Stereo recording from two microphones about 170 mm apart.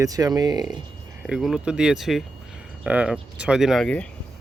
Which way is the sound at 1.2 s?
Centre (ahead or behind).